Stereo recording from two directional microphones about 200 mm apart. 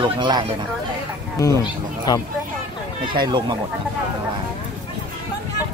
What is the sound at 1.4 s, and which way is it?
Speech, 15° left (ahead or behind).